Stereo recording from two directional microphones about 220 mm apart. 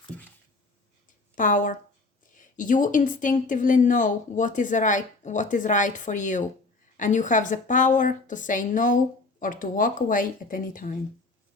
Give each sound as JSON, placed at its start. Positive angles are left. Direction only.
{"t": 1.4, "sound": "speech", "side_deg": 35}